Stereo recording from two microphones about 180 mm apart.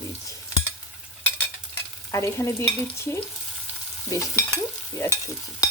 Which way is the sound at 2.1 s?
15° left (ahead or behind).